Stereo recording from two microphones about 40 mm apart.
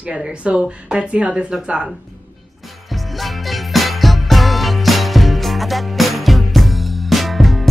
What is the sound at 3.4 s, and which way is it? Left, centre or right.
Music, centre.